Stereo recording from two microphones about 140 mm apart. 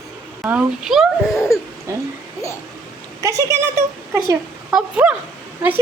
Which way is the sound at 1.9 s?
20° right (ahead or behind).